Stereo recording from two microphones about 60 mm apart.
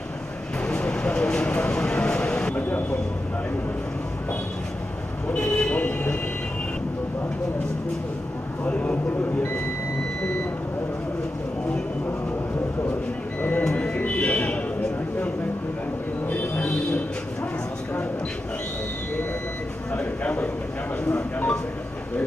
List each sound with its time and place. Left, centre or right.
0.6 s vehicle: centre
2.5 s vehicle: left
5.3 s speech: centre
8.6 s a man's voice: left
13.4 s printer: left
13.9 s a sound: left
19.9 s a sound: left